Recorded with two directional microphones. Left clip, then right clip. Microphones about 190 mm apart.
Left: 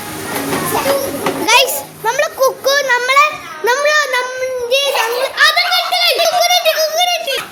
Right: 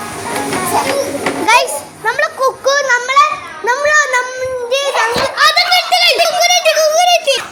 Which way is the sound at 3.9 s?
10° left (ahead or behind).